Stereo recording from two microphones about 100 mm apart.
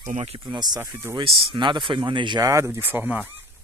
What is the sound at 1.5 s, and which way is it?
Speech, 55° right (ahead or behind).